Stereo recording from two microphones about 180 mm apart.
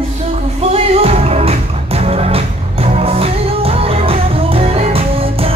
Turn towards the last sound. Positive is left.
turn(degrees=-35)  # may be behind; listen again after turning